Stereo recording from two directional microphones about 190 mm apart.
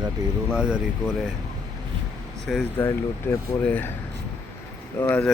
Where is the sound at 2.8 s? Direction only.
15° left (ahead or behind).